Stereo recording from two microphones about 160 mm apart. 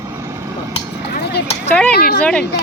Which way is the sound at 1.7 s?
10° left (ahead or behind).